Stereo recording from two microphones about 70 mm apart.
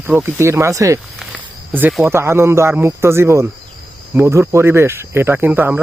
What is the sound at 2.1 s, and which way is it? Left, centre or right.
Speech, right.